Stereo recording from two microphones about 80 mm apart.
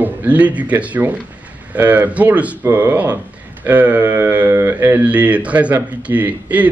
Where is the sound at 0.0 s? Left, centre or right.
Right.